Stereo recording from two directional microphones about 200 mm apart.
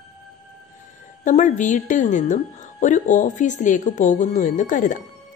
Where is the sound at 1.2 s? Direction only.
40° left (ahead or behind).